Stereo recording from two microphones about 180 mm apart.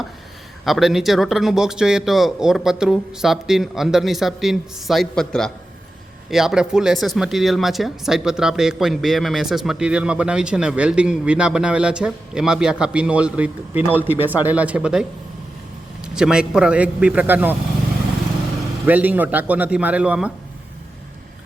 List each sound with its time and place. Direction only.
0.6 s a man's voice: centre (ahead or behind)
18.9 s a man's voice: 10° right (ahead or behind)